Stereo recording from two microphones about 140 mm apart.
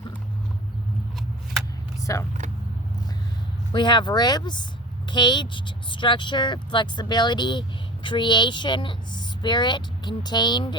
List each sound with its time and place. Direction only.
2.0 s vehicle: 25° left (ahead or behind)
3.7 s speech: 35° left (ahead or behind)